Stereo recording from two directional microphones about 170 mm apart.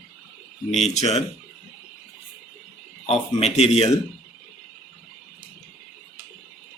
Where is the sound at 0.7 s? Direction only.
40° left (ahead or behind).